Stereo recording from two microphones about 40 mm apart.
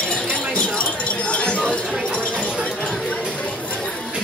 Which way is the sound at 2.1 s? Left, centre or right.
Left.